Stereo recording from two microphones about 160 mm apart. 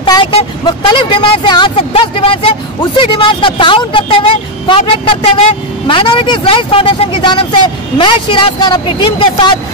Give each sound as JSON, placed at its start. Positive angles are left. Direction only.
{"t": 0.0, "sound": "speech", "side_deg": 30}